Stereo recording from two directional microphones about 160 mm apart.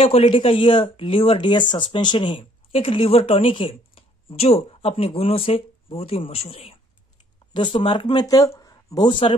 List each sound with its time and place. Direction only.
0.0 s speech: 35° left (ahead or behind)